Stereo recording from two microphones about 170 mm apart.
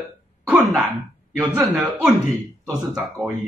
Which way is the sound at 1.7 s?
5° right (ahead or behind).